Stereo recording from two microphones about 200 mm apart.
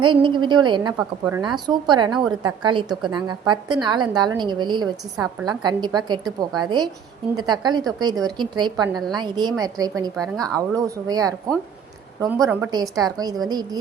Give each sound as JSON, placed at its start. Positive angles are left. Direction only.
{"t": 0.0, "sound": "a woman's voice", "side_deg": -25}
{"t": 10.2, "sound": "a woman's voice", "side_deg": 5}
{"t": 10.8, "sound": "a woman's voice", "side_deg": -20}